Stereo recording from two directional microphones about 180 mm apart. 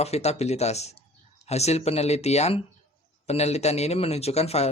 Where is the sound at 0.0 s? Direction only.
35° left (ahead or behind).